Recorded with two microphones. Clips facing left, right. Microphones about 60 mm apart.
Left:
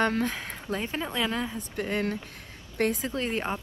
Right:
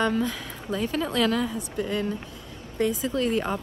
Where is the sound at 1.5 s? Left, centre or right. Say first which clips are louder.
Right 2 dB; left.